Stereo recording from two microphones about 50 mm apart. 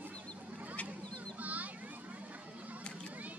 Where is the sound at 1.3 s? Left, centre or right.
Right.